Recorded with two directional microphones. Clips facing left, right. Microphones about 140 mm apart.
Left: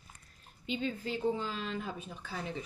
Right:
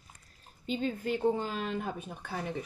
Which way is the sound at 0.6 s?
45° right (ahead or behind).